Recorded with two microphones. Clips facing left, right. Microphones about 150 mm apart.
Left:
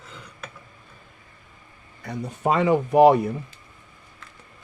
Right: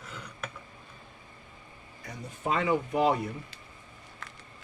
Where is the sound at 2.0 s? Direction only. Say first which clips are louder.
Left 9 dB; 65° left (ahead or behind).